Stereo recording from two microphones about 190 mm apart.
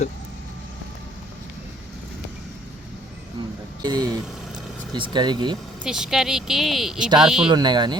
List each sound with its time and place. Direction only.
3.8 s speech: 20° right (ahead or behind)
5.8 s speech: 5° right (ahead or behind)
7.5 s speech: 25° right (ahead or behind)